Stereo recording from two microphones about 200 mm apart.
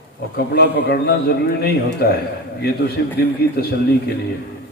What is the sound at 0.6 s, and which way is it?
A man's voice, 55° left (ahead or behind).